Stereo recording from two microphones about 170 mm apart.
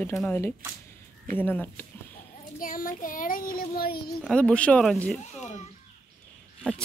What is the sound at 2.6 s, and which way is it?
Child singing, 55° left (ahead or behind).